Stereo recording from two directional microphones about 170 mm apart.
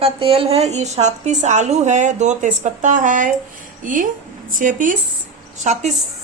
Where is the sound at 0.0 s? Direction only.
35° right (ahead or behind).